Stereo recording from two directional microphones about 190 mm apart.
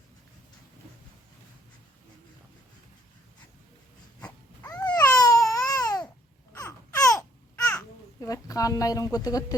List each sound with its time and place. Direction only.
4.8 s baby cry: 20° left (ahead or behind)
6.5 s babbling: 15° left (ahead or behind)
8.3 s a woman's voice: 20° left (ahead or behind)